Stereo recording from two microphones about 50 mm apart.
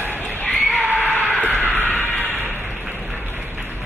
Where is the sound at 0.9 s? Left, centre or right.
Left.